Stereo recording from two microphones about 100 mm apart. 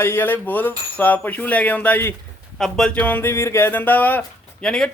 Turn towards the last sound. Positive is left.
turn(degrees=5)  # may be behind; listen again after turning